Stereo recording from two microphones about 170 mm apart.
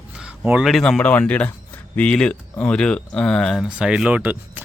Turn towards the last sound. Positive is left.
turn(degrees=-10)  # may be behind; listen again after turning